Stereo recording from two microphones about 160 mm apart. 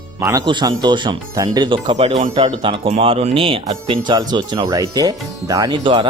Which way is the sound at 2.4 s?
30° right (ahead or behind).